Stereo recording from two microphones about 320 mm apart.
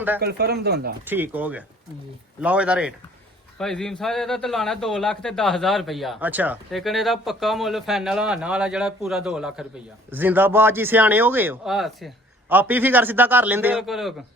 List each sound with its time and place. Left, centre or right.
0.2 s speech: right
1.0 s speech: centre